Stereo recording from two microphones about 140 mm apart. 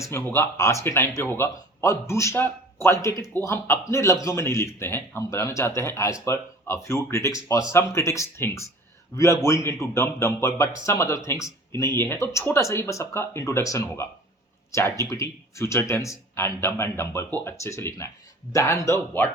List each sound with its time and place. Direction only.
0.0 s a man's voice: 15° left (ahead or behind)